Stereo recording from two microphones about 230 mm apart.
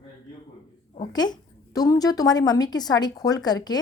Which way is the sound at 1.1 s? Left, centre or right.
Centre.